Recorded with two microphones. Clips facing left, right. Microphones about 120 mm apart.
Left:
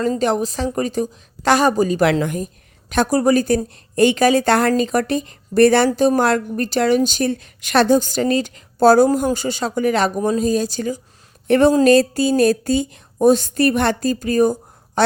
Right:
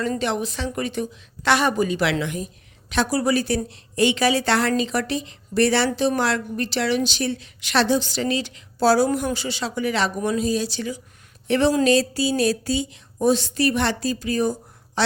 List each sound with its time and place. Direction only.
0.2 s a woman's voice: 40° left (ahead or behind)